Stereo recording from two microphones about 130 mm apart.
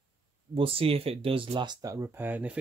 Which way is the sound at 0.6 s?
45° right (ahead or behind).